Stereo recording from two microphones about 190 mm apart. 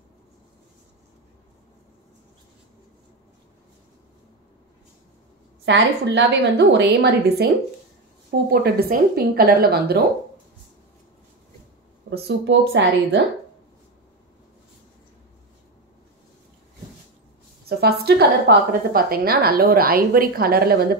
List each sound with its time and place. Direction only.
5.7 s a woman's voice: 65° right (ahead or behind)
12.1 s a woman's voice: 70° right (ahead or behind)
17.6 s a woman's voice: 55° right (ahead or behind)